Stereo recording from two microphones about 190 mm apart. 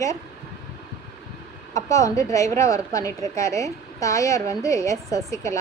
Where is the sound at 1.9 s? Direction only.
15° left (ahead or behind).